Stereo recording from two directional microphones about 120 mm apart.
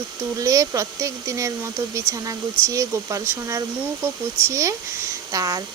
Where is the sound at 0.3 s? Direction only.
30° right (ahead or behind).